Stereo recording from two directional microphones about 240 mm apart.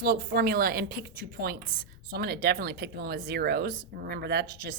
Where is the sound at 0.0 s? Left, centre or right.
Right.